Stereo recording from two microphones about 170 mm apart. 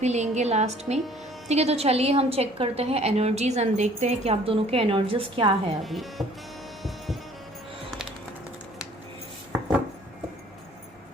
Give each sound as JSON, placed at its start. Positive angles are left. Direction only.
{"t": 0.0, "sound": "a woman's voice", "side_deg": -40}
{"t": 5.8, "sound": "speech", "side_deg": 0}